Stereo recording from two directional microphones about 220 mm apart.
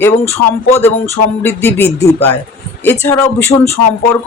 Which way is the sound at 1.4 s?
10° left (ahead or behind).